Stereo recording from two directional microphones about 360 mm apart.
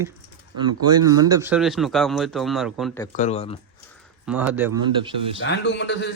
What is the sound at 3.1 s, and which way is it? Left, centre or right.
Speech, centre.